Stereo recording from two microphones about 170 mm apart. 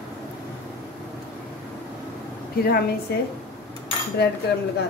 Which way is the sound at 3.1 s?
75° left (ahead or behind).